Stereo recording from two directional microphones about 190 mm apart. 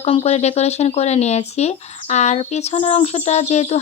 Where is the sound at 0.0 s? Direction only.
35° left (ahead or behind).